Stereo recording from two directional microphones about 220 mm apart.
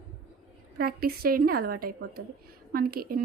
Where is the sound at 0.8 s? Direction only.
40° right (ahead or behind).